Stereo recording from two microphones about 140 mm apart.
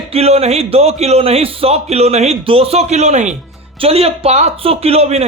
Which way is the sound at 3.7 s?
45° right (ahead or behind).